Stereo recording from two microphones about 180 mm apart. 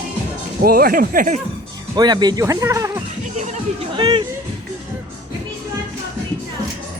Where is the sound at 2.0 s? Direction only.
25° right (ahead or behind).